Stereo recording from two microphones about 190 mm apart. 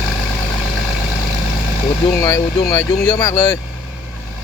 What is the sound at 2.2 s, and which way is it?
Speech, 15° left (ahead or behind).